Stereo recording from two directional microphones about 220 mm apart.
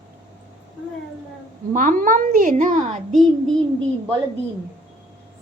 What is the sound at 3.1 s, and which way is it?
Child singing, centre (ahead or behind).